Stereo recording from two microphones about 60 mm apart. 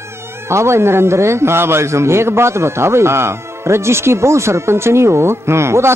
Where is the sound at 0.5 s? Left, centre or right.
Right.